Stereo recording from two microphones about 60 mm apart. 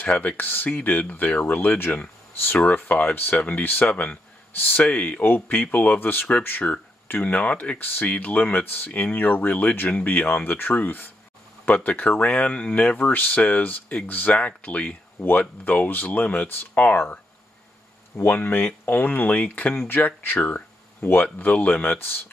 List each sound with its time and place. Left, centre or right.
0.0 s speech: left
0.4 s speech: left
7.8 s speech: left
18.1 s speech: left